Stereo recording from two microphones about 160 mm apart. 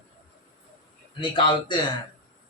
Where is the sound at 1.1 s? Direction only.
30° left (ahead or behind).